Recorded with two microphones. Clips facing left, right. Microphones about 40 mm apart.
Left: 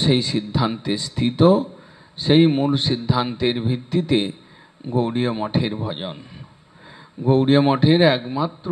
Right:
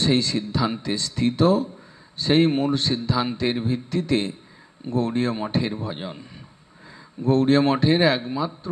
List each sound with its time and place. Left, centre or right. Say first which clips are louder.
0.0 s a man's voice: left 2 dB; centre